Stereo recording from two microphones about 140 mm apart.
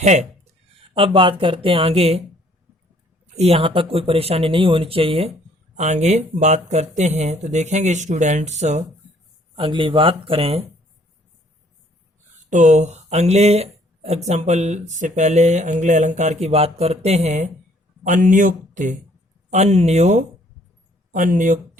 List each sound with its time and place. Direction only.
0.0 s speech: 55° right (ahead or behind)
0.9 s speech: 40° right (ahead or behind)
3.3 s speech: 45° right (ahead or behind)
5.7 s speech: 55° right (ahead or behind)
9.6 s speech: 40° right (ahead or behind)
12.5 s speech: 60° right (ahead or behind)
21.1 s speech: 70° right (ahead or behind)